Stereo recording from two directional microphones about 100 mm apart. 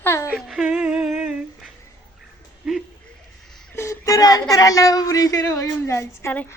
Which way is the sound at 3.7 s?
30° left (ahead or behind).